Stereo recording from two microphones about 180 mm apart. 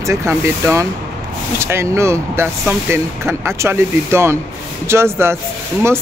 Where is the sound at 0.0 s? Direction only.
15° right (ahead or behind).